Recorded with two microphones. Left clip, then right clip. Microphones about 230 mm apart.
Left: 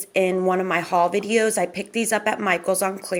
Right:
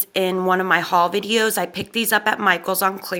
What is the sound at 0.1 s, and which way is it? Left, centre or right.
Speech, centre.